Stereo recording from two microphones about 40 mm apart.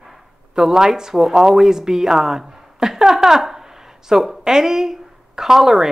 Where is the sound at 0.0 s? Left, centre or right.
Centre.